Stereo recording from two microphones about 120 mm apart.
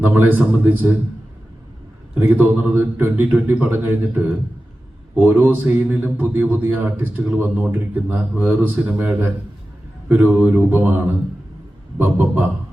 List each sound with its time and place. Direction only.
0.0 s a man's voice: 15° right (ahead or behind)
2.1 s a man's voice: 15° right (ahead or behind)